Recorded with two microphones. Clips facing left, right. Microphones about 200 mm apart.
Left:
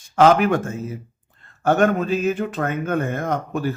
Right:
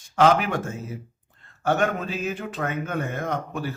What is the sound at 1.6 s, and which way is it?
A man's voice, 50° left (ahead or behind).